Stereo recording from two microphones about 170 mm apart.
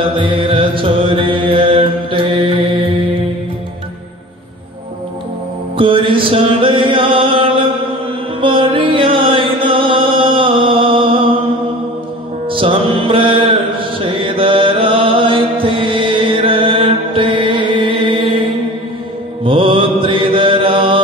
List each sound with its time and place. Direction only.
0.0 s mantra: 30° right (ahead or behind)
5.8 s music: 30° right (ahead or behind)
12.4 s music: 30° right (ahead or behind)
19.4 s mantra: 30° right (ahead or behind)